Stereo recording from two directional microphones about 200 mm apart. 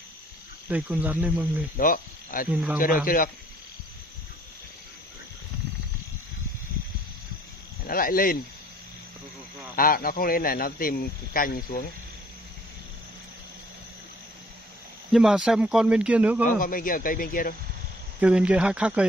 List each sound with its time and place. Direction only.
0.7 s speech: 5° right (ahead or behind)
1.8 s speech: 45° left (ahead or behind)
2.5 s speech: centre (ahead or behind)
7.8 s speech: 45° left (ahead or behind)
9.8 s speech: 45° left (ahead or behind)
15.0 s speech: 5° right (ahead or behind)
16.4 s speech: 45° left (ahead or behind)
18.2 s speech: 5° right (ahead or behind)